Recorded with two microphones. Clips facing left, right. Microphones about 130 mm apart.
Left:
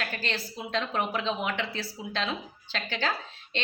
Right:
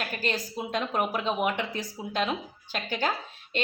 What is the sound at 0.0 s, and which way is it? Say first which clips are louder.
A woman's voice: right 3 dB; 10° right (ahead or behind).